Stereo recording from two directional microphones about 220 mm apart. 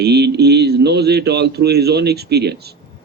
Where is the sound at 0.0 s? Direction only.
50° right (ahead or behind).